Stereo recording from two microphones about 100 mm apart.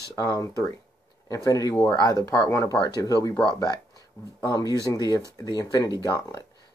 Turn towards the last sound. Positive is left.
turn(degrees=45)  # may be behind; listen again after turning